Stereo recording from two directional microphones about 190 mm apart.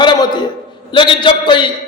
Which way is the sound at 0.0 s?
25° left (ahead or behind).